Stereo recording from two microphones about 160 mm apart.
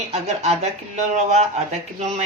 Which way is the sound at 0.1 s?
40° right (ahead or behind).